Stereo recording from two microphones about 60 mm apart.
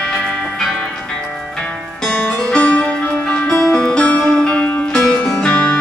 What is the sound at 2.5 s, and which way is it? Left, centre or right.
Music, left.